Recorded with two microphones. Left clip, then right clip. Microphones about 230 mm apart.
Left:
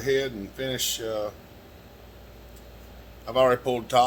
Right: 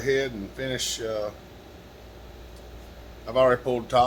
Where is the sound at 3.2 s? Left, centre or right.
Centre.